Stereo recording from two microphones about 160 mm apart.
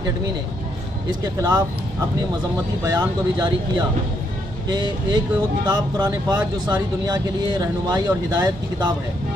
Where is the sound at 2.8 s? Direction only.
25° right (ahead or behind).